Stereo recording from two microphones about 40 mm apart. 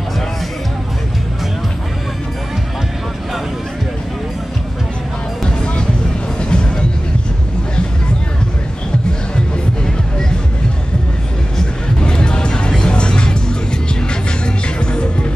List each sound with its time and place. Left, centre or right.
5.4 s music: left
12.0 s music: left
14.4 s music: left